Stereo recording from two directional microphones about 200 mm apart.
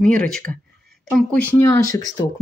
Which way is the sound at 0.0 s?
5° left (ahead or behind).